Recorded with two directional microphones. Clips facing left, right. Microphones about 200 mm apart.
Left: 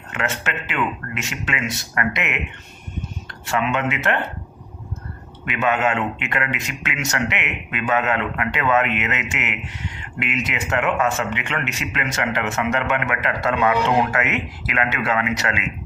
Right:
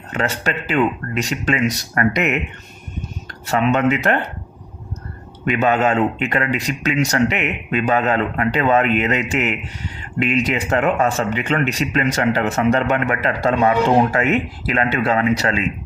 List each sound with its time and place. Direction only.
0.1 s speech: 35° right (ahead or behind)
3.4 s speech: 40° right (ahead or behind)
5.5 s speech: 35° right (ahead or behind)